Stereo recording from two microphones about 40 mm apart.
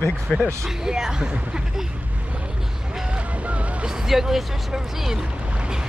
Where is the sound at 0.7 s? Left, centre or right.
Centre.